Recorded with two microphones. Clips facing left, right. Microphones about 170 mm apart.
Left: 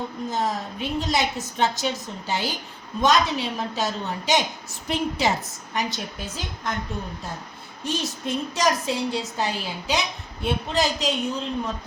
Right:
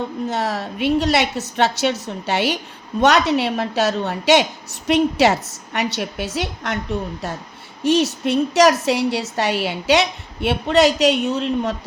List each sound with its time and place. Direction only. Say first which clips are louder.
0.3 s a woman's voice: even; 75° right (ahead or behind)
7.9 s a woman's voice: right 10 dB; 70° right (ahead or behind)